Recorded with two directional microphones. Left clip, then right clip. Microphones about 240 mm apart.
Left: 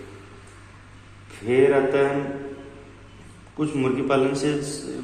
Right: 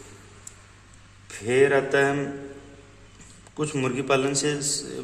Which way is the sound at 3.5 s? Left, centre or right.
Right.